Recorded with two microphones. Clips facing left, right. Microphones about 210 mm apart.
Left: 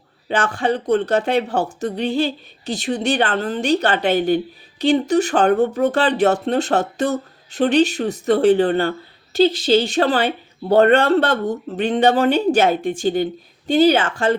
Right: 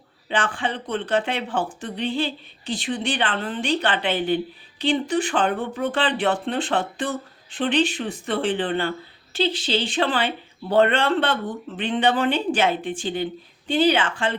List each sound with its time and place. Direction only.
0.3 s speech: 40° left (ahead or behind)